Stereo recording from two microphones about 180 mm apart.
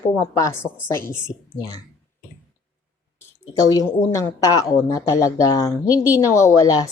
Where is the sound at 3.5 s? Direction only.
20° left (ahead or behind).